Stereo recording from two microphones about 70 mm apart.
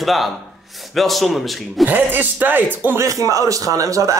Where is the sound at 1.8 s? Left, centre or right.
Right.